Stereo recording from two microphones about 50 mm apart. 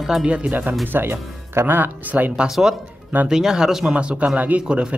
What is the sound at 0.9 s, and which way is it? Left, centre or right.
Speech, right.